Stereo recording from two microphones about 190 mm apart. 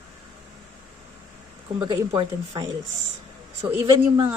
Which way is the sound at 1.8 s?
25° right (ahead or behind).